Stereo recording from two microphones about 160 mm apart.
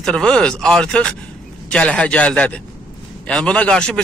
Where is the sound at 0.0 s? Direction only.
5° left (ahead or behind).